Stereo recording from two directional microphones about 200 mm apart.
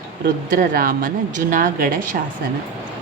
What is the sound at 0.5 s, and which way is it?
A woman's voice, 45° right (ahead or behind).